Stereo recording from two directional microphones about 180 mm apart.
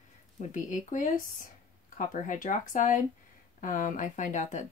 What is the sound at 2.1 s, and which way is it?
Speech, 45° left (ahead or behind).